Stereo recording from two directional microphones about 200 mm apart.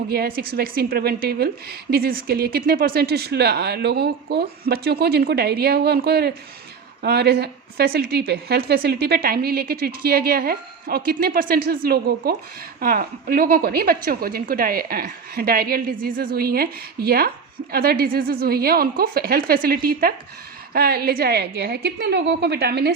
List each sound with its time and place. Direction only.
0.1 s a woman's voice: 50° right (ahead or behind)